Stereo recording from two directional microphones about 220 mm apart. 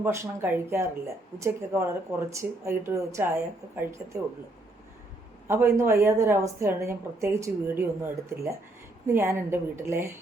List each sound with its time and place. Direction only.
0.0 s a woman's voice: 15° right (ahead or behind)
5.5 s a woman's voice: 10° right (ahead or behind)